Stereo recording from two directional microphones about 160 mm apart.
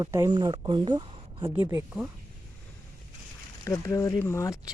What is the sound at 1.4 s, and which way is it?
Speech, 15° right (ahead or behind).